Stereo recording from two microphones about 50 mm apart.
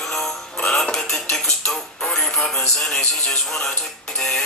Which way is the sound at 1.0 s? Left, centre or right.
Centre.